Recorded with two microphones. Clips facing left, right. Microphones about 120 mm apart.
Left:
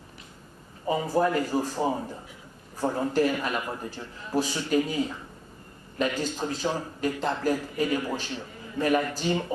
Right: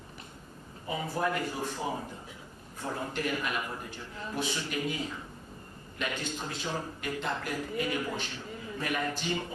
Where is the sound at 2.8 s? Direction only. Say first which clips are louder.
Left 10 dB; 35° left (ahead or behind).